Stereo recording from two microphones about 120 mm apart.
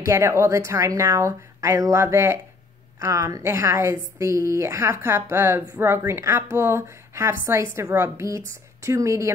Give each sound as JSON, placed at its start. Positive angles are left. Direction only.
{"t": 0.0, "sound": "speech", "side_deg": -25}